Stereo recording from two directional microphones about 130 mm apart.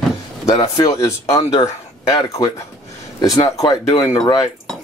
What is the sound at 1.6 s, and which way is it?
Speech, 25° left (ahead or behind).